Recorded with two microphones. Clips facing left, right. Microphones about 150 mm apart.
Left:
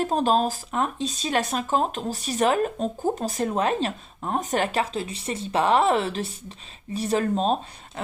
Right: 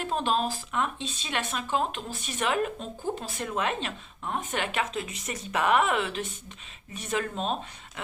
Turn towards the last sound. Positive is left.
turn(degrees=35)  # may be behind; listen again after turning